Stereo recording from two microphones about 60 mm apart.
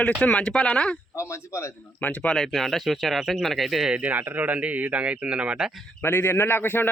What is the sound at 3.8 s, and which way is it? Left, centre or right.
Speech, right.